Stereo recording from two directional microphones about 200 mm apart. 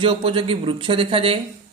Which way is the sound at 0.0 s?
25° right (ahead or behind).